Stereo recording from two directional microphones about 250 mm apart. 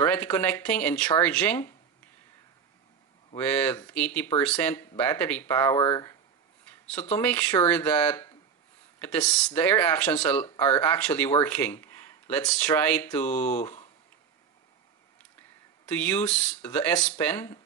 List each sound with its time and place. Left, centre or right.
0.0 s speech: centre
3.3 s speech: centre
7.2 s speech: centre
13.3 s speech: left
15.9 s speech: centre